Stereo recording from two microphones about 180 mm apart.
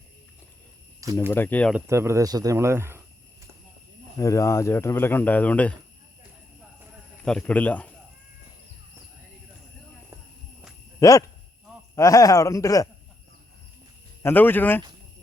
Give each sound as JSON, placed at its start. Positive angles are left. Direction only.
{"t": 1.3, "sound": "speech", "side_deg": 10}
{"t": 1.7, "sound": "speech", "side_deg": -15}
{"t": 4.2, "sound": "speech", "side_deg": 15}
{"t": 7.3, "sound": "speech", "side_deg": 5}
{"t": 11.0, "sound": "speech", "side_deg": 15}
{"t": 14.2, "sound": "speech", "side_deg": 10}